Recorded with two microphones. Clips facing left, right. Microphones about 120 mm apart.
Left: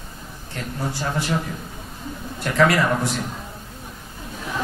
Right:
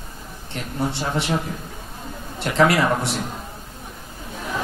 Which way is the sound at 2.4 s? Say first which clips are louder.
Right 1 dB; 25° right (ahead or behind).